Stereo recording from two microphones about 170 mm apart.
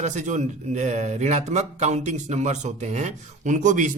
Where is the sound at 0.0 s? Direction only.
45° right (ahead or behind).